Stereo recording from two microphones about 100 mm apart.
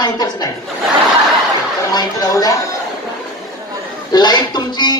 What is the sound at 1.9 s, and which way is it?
Speech, 40° left (ahead or behind).